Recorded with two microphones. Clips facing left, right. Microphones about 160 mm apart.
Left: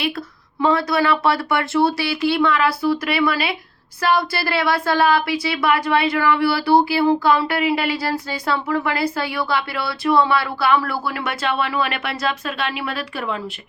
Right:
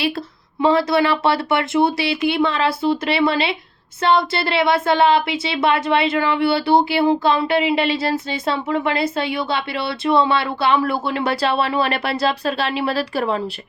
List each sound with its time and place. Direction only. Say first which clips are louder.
0.6 s speech: right 2 dB; 25° right (ahead or behind)